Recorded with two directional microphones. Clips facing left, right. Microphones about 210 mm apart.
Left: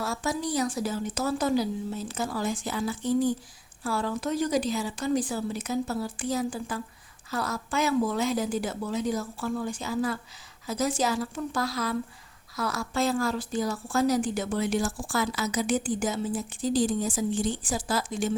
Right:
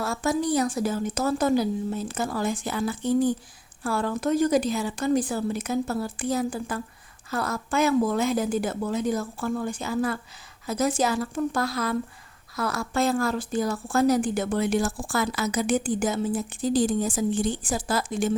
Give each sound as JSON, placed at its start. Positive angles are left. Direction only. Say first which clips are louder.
{"t": 0.0, "sound": "a woman's voice", "louder": "right 4 dB", "side_deg": -55}